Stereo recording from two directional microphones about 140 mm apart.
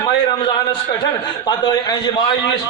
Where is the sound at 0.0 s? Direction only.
35° left (ahead or behind).